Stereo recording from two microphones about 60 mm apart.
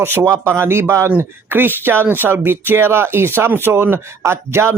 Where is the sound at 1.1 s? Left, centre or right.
Right.